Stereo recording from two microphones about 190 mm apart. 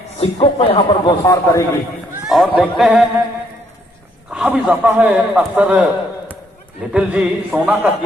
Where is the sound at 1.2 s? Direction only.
15° left (ahead or behind).